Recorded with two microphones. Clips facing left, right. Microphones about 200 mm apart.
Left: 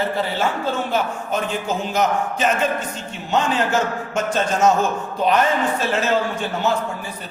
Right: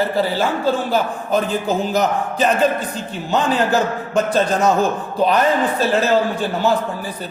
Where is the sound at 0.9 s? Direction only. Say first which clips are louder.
Right 4 dB; 35° right (ahead or behind).